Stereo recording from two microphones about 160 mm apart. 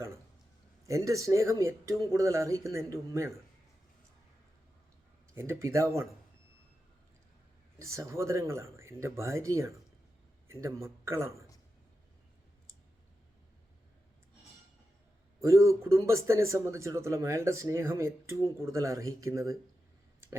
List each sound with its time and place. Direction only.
0.9 s speech: 20° right (ahead or behind)
5.3 s speech: 15° right (ahead or behind)
7.8 s speech: 20° right (ahead or behind)
15.4 s speech: 20° right (ahead or behind)